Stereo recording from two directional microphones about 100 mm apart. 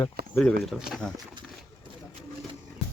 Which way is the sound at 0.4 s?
Centre (ahead or behind).